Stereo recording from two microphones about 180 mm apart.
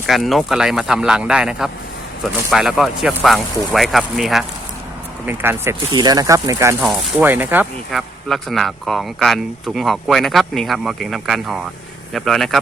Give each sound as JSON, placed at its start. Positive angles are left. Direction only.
{"t": 0.0, "sound": "speech", "side_deg": 0}
{"t": 5.2, "sound": "speech", "side_deg": -10}
{"t": 5.9, "sound": "speech", "side_deg": -25}
{"t": 7.9, "sound": "speech", "side_deg": 0}